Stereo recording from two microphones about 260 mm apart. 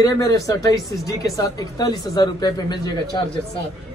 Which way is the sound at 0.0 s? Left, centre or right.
Centre.